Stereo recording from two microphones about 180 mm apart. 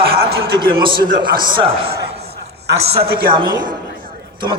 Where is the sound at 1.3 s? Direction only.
55° right (ahead or behind).